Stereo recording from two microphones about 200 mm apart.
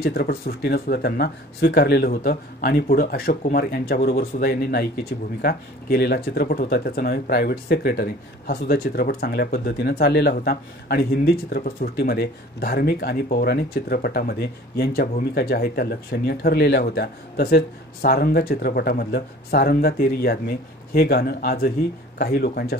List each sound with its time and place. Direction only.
0.0 s speech: 50° left (ahead or behind)